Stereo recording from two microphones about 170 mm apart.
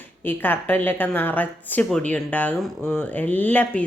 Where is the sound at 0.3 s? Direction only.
10° left (ahead or behind).